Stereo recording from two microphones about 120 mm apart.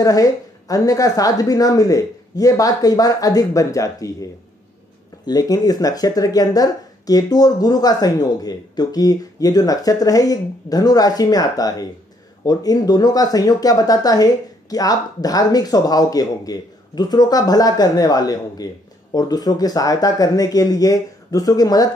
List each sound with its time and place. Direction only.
0.0 s a woman's voice: 30° left (ahead or behind)